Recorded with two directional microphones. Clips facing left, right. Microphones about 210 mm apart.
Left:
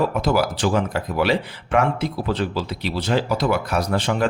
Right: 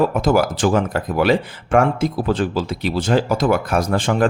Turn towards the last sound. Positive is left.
turn(degrees=-50)  # may be behind; listen again after turning